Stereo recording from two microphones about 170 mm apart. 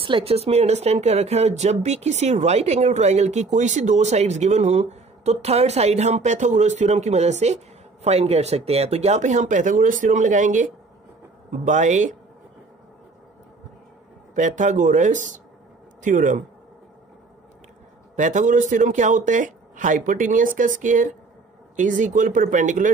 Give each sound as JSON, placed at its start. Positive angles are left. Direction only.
{"t": 0.0, "sound": "speech", "side_deg": -35}
{"t": 14.3, "sound": "speech", "side_deg": -45}
{"t": 18.1, "sound": "speech", "side_deg": -45}